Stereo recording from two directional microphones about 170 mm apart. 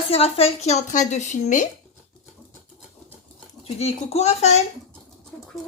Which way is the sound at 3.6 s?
40° left (ahead or behind).